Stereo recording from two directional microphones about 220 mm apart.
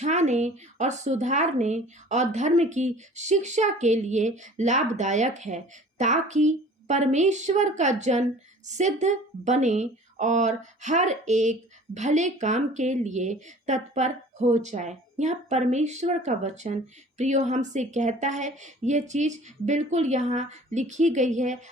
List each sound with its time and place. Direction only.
0.0 s a woman's voice: 30° right (ahead or behind)